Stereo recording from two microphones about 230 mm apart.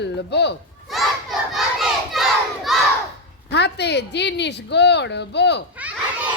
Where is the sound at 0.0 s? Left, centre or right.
Left.